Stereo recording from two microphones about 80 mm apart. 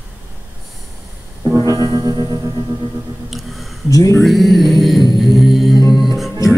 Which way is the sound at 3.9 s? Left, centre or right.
Left.